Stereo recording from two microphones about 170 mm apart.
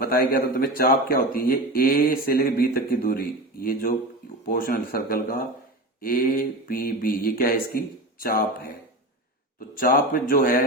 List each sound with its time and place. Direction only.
0.0 s speech: 60° left (ahead or behind)
9.6 s speech: 55° left (ahead or behind)